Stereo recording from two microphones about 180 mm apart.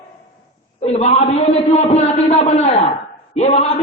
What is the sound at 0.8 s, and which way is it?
A man's voice, 35° left (ahead or behind).